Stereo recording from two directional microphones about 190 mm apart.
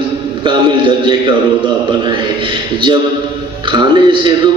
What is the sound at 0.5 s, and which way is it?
Speech, 25° right (ahead or behind).